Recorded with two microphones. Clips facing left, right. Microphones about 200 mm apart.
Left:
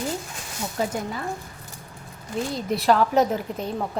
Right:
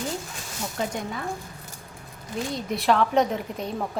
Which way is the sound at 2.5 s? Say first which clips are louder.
Left 2 dB; centre (ahead or behind).